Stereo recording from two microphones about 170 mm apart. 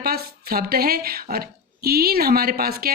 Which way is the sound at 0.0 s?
65° right (ahead or behind).